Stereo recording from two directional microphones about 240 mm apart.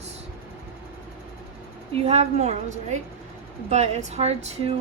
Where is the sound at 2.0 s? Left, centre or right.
Right.